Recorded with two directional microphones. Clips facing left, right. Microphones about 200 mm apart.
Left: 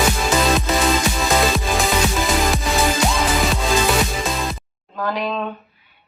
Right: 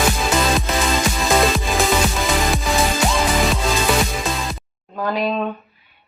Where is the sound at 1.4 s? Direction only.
Centre (ahead or behind).